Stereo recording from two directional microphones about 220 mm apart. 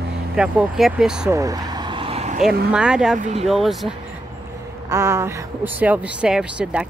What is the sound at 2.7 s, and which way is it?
Speech, 5° right (ahead or behind).